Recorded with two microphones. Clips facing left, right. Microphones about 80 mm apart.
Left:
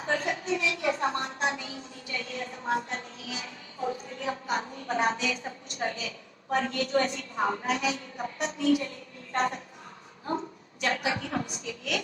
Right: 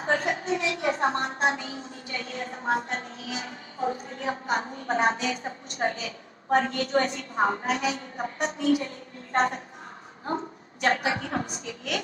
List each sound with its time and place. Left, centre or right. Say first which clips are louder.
0.0 s a woman's voice: right 3 dB; right